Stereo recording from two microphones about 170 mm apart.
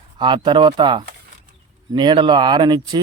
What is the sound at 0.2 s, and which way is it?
A man's voice, 25° right (ahead or behind).